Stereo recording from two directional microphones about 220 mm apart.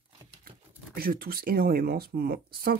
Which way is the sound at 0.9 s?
40° right (ahead or behind).